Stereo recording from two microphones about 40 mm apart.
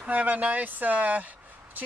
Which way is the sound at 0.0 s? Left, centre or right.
Right.